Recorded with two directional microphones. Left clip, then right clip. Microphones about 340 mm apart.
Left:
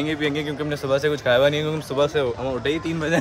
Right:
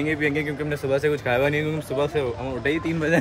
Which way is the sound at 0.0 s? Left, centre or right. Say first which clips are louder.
Even; centre.